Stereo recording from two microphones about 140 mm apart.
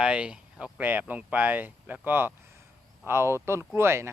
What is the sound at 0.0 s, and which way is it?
A man's voice, 10° right (ahead or behind).